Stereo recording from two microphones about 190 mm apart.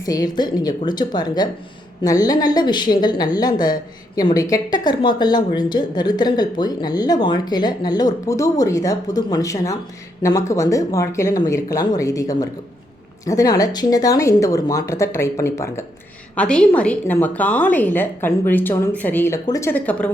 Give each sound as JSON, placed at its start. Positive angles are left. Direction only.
{"t": 0.0, "sound": "a woman's voice", "side_deg": 20}